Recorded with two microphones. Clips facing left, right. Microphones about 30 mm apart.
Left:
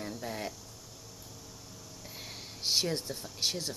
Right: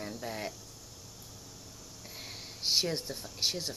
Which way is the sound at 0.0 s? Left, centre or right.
Centre.